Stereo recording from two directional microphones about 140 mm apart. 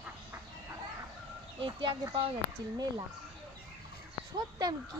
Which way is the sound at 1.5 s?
35° right (ahead or behind).